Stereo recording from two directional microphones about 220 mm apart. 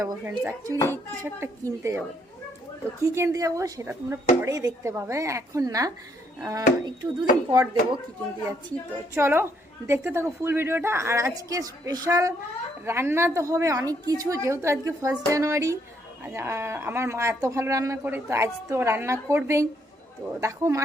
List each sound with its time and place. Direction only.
0.0 s speech: 10° right (ahead or behind)
9.1 s speech: 10° right (ahead or behind)